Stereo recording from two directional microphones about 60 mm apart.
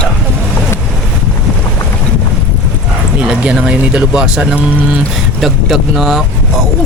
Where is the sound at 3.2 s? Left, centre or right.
Centre.